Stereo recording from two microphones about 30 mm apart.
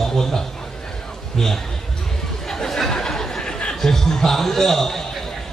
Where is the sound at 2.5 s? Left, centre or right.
Centre.